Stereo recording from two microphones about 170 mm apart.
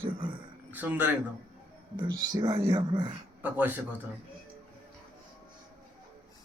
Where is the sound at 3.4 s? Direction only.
10° right (ahead or behind).